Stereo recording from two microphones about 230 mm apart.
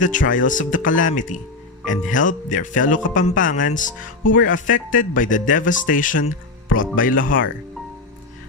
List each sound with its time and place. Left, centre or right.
0.0 s speech: left